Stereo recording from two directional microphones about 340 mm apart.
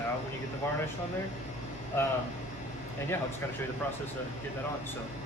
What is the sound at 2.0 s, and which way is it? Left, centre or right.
Speech, centre.